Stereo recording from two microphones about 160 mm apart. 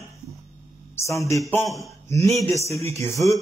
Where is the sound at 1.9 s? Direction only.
15° left (ahead or behind).